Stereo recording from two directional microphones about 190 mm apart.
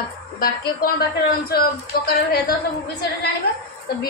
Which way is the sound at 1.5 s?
55° left (ahead or behind).